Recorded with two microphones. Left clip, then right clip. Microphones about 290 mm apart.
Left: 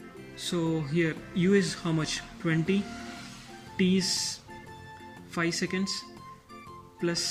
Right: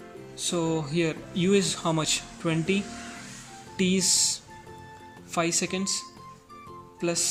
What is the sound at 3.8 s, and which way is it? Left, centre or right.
Speech, centre.